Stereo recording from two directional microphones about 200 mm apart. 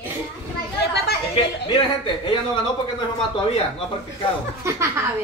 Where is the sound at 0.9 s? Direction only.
55° left (ahead or behind).